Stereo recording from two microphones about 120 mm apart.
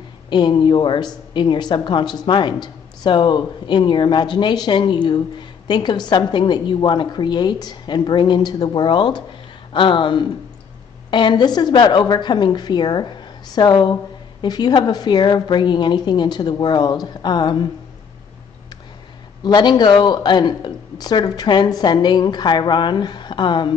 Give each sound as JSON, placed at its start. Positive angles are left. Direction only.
{"t": 0.3, "sound": "speech", "side_deg": 40}
{"t": 19.4, "sound": "speech", "side_deg": 35}